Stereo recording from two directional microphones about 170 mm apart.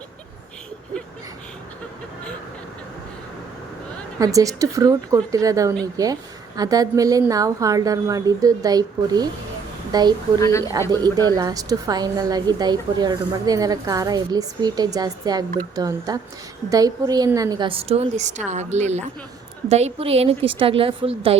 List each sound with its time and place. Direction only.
4.2 s a woman's voice: 20° right (ahead or behind)
10.4 s speech: 15° left (ahead or behind)
10.7 s a woman's voice: 20° right (ahead or behind)